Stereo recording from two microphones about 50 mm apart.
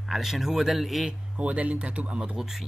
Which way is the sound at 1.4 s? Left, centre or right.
Right.